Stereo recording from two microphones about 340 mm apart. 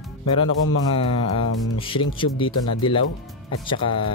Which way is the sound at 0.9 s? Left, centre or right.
Centre.